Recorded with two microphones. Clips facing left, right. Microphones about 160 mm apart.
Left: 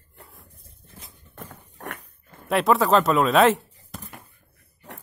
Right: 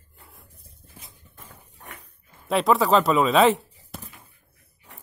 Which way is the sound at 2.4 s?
Centre (ahead or behind).